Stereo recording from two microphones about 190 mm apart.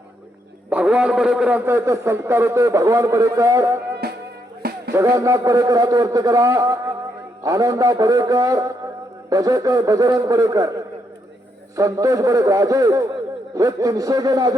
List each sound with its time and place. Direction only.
0.7 s a man's voice: 5° right (ahead or behind)
4.6 s music: 50° right (ahead or behind)
4.9 s a man's voice: 15° right (ahead or behind)